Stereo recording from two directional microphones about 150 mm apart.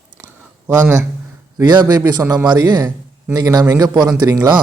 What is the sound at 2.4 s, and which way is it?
A man's voice, 30° right (ahead or behind).